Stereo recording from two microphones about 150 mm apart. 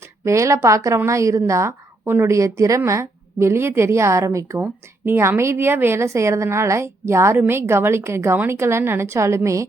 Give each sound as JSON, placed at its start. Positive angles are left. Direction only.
{"t": 0.3, "sound": "a woman's voice", "side_deg": -20}